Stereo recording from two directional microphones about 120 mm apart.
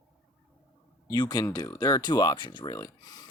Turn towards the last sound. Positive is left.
turn(degrees=30)  # may be behind; listen again after turning